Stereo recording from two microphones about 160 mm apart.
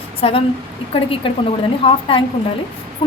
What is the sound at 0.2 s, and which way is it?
Speech, 35° left (ahead or behind).